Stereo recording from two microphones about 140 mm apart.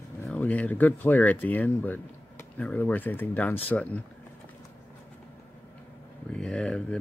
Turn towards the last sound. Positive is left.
turn(degrees=5)  # may be behind; listen again after turning